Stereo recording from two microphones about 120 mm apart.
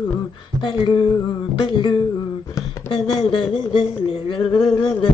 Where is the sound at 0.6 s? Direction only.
45° left (ahead or behind).